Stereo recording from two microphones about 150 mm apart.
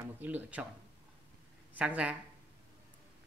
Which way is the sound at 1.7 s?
10° right (ahead or behind).